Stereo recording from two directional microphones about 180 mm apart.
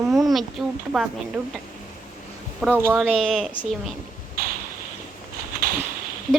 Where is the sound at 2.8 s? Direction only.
15° right (ahead or behind).